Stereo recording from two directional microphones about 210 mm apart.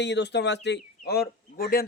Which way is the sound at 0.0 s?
55° left (ahead or behind).